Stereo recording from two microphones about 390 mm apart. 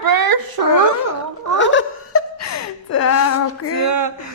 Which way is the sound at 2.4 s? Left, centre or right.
Left.